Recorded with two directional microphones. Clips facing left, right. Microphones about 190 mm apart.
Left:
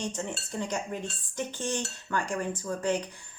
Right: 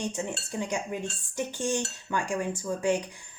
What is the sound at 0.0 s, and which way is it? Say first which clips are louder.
Cutlery: right 2 dB; 10° right (ahead or behind).